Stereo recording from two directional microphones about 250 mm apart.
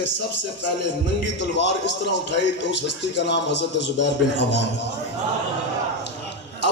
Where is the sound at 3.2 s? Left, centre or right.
Left.